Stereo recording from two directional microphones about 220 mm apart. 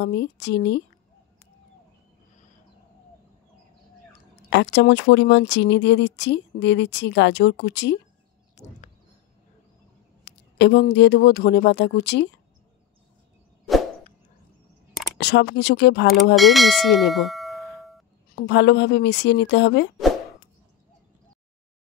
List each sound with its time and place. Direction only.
0.0 s speech: 50° left (ahead or behind)
4.5 s speech: 50° left (ahead or behind)
8.6 s a sound: 30° left (ahead or behind)
10.2 s speech: 50° left (ahead or behind)
15.1 s speech: 50° left (ahead or behind)
16.3 s speech: centre (ahead or behind)
18.3 s speech: 50° left (ahead or behind)